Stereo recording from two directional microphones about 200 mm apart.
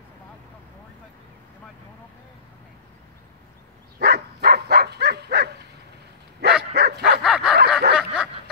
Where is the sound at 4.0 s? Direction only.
55° right (ahead or behind).